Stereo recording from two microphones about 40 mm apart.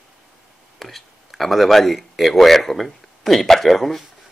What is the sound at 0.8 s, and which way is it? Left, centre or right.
Speech, centre.